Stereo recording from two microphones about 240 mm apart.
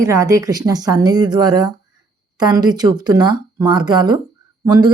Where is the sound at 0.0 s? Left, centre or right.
Centre.